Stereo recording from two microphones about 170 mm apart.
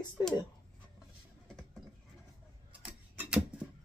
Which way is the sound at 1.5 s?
Centre (ahead or behind).